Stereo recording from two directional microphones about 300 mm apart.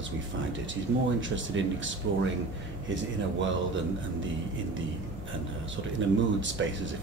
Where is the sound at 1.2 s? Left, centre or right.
Right.